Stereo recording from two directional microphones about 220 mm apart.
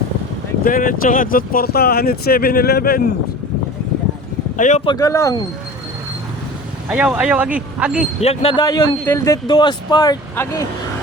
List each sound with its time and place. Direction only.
0.6 s speech: 40° left (ahead or behind)
4.5 s speech: 35° left (ahead or behind)
4.9 s speech: 15° left (ahead or behind)
6.8 s speech: 5° right (ahead or behind)
8.2 s speech: 25° left (ahead or behind)